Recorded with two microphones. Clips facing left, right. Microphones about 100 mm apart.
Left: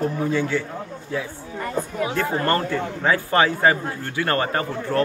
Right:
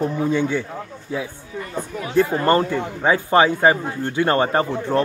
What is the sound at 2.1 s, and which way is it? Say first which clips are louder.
A man's voice: right 7 dB; 20° right (ahead or behind).